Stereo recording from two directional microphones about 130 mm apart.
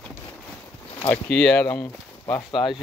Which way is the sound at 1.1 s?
5° left (ahead or behind).